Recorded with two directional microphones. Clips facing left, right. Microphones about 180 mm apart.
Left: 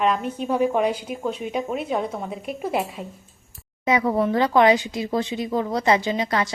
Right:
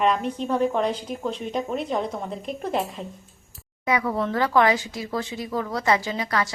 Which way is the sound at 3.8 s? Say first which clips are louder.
Left 4 dB; 20° left (ahead or behind).